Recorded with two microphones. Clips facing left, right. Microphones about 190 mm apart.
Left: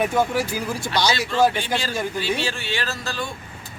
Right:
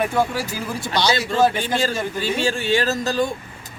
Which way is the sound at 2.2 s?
45° right (ahead or behind).